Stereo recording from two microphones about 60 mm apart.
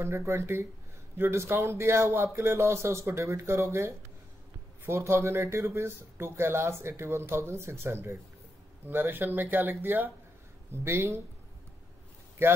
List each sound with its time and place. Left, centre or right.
0.0 s speech: right
4.8 s speech: right